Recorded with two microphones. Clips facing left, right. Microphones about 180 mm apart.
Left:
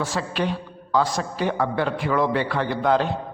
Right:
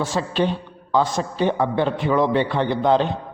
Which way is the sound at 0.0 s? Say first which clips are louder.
Right 4 dB; 25° right (ahead or behind).